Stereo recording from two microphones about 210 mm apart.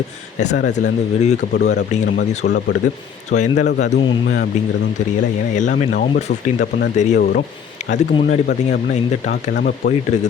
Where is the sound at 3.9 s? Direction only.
55° left (ahead or behind).